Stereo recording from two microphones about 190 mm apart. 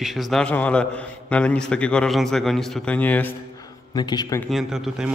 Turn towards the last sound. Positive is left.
turn(degrees=-5)  # may be behind; listen again after turning